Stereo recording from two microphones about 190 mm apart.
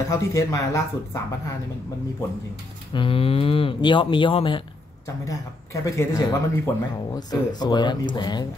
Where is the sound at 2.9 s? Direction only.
30° left (ahead or behind).